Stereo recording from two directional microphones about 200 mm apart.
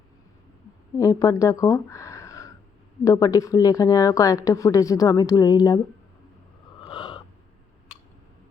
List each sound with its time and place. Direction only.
0.9 s a woman's voice: 15° left (ahead or behind)
6.8 s gasp: 25° left (ahead or behind)